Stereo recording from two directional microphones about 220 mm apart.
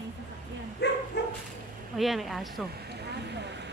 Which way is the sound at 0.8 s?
50° left (ahead or behind).